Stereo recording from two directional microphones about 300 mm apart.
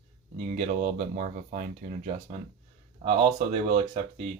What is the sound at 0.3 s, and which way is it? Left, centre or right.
Speech, right.